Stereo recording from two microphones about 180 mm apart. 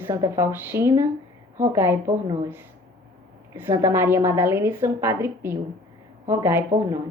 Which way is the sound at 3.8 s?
15° right (ahead or behind).